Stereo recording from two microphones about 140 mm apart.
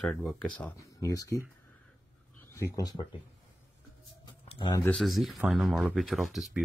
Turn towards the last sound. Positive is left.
turn(degrees=0)  # may be behind; listen again after turning